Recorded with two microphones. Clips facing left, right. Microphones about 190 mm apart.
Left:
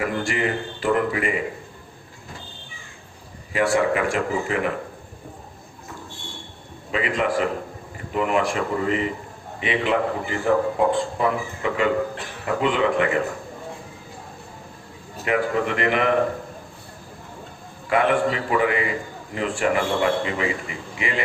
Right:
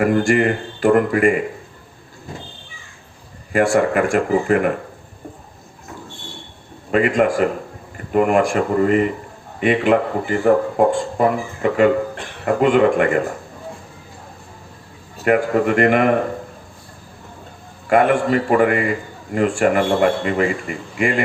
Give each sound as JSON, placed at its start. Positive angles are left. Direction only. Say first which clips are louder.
{"t": 0.0, "sound": "a man's voice", "louder": "right 9 dB", "side_deg": -50}
{"t": 3.5, "sound": "a man's voice", "louder": "right 4 dB", "side_deg": -50}
{"t": 6.9, "sound": "a man's voice", "louder": "right 7 dB", "side_deg": -50}
{"t": 15.2, "sound": "a man's voice", "louder": "right 6 dB", "side_deg": -50}
{"t": 17.8, "sound": "a man's voice", "louder": "right 5 dB", "side_deg": -50}